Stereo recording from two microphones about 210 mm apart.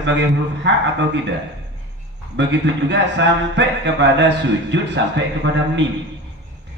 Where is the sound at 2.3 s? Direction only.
55° right (ahead or behind).